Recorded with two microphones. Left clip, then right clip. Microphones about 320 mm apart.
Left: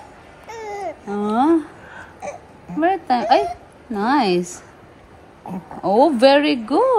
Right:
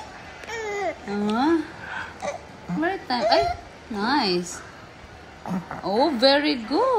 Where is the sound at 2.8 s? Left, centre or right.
Left.